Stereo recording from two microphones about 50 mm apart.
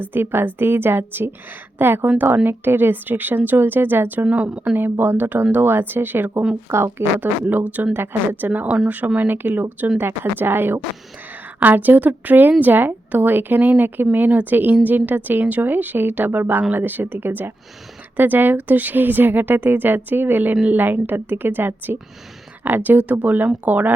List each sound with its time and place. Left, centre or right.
0.0 s a woman's voice: right
2.1 s a woman's voice: right
4.3 s a woman's voice: right
4.8 s a woman's voice: right
6.7 s speech: right
7.2 s a woman's voice: right
7.9 s a woman's voice: right
8.4 s a woman's voice: right
10.0 s a woman's voice: right